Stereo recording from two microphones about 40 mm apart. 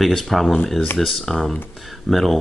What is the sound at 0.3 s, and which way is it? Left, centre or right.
Speech, centre.